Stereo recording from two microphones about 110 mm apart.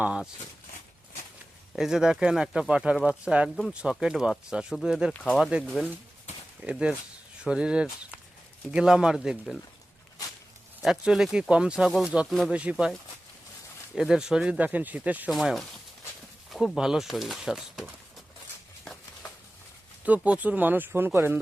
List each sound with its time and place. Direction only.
0.0 s speech: 10° right (ahead or behind)
1.7 s speech: 5° right (ahead or behind)
10.8 s speech: 5° right (ahead or behind)
13.9 s speech: 5° right (ahead or behind)
15.3 s speech: centre (ahead or behind)
20.1 s speech: 10° right (ahead or behind)